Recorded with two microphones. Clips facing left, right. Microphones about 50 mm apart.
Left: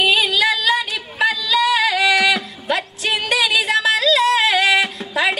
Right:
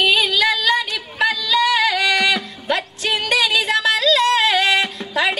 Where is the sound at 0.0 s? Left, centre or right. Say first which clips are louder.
Even; centre.